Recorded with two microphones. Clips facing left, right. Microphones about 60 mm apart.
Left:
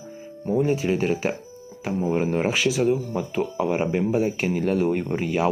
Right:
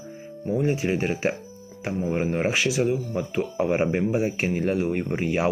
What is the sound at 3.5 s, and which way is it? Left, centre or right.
Speech, right.